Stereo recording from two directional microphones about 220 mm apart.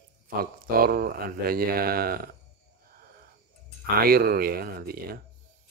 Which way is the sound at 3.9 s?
40° right (ahead or behind).